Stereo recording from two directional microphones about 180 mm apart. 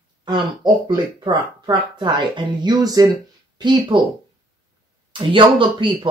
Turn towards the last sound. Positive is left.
turn(degrees=-25)  # may be behind; listen again after turning